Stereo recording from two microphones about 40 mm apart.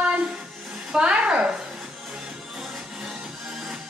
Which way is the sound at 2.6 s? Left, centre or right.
Centre.